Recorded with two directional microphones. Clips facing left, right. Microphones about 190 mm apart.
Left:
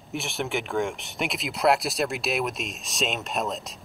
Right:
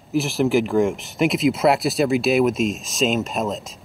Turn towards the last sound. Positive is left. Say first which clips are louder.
# right 4 dB
turn(degrees=0)  # may be behind; listen again after turning